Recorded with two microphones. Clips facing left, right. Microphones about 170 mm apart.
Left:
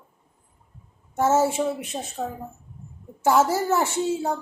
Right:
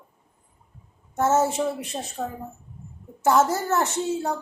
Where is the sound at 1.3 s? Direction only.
10° left (ahead or behind).